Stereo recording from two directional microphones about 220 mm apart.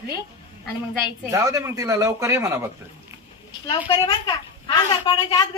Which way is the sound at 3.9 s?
20° left (ahead or behind).